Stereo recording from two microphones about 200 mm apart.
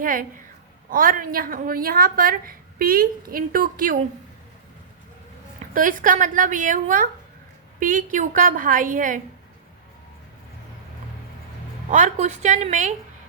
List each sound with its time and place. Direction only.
0.0 s a woman's voice: 45° right (ahead or behind)
5.7 s a woman's voice: 40° right (ahead or behind)
11.9 s a woman's voice: 40° right (ahead or behind)